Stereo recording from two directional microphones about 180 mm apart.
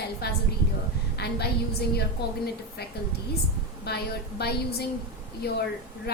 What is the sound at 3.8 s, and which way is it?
A woman's voice, 65° left (ahead or behind).